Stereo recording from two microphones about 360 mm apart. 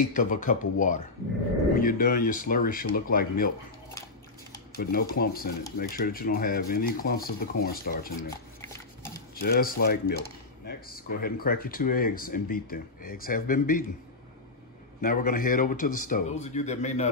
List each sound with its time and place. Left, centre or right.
0.1 s speech: left
4.7 s speech: left
8.5 s a sound: centre
9.3 s speech: left
15.0 s speech: left